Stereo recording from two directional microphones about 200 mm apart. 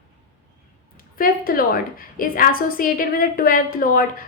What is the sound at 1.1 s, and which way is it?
A woman's voice, 45° left (ahead or behind).